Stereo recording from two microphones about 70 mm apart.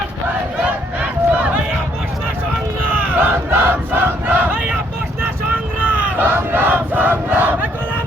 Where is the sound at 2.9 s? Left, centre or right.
Right.